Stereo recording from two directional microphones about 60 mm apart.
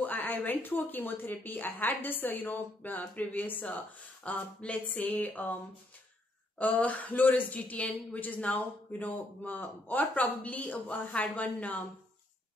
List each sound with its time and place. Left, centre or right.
0.0 s speech: left
6.6 s a woman's voice: left